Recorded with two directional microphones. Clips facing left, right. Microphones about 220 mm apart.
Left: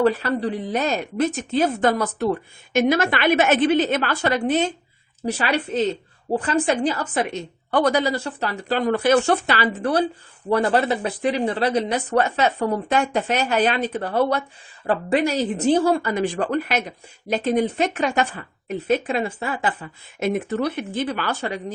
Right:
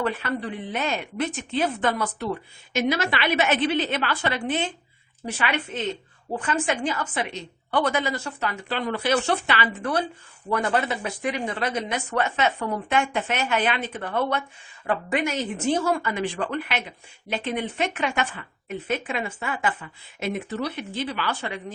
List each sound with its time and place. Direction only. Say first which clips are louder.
0.0 s a woman's voice: left 7 dB; 35° left (ahead or behind)
20.1 s speech: left 6 dB; 50° left (ahead or behind)